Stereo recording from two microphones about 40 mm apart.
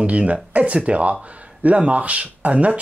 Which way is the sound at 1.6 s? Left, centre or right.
Right.